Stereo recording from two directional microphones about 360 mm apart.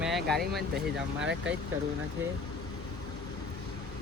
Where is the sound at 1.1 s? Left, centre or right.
Right.